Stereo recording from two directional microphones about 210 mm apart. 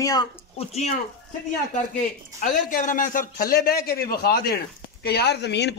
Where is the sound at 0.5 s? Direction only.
30° left (ahead or behind).